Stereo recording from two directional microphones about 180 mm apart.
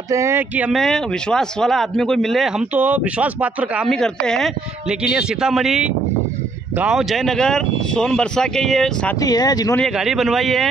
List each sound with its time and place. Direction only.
0.1 s speech: 15° right (ahead or behind); by 9.1 s centre (ahead or behind)
9.2 s speech: 20° left (ahead or behind)
9.8 s speech: centre (ahead or behind)